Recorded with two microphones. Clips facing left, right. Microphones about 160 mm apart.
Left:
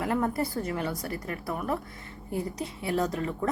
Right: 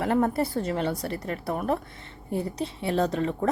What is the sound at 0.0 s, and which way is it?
Speech, 30° right (ahead or behind).